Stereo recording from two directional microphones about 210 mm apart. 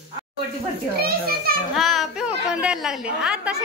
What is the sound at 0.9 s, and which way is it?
Speech, 45° right (ahead or behind).